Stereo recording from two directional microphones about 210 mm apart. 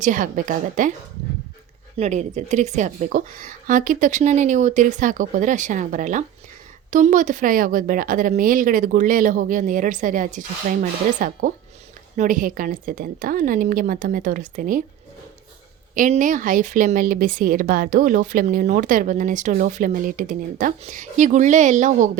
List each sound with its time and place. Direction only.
0.0 s speech: 40° right (ahead or behind)
2.0 s speech: 35° right (ahead or behind)
16.0 s speech: 35° right (ahead or behind)